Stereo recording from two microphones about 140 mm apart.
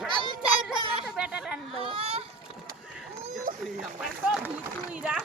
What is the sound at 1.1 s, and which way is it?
Speech, 10° right (ahead or behind).